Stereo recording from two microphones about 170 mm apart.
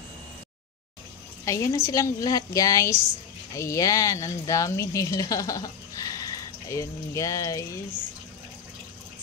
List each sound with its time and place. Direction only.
1.4 s a woman's voice: 15° left (ahead or behind)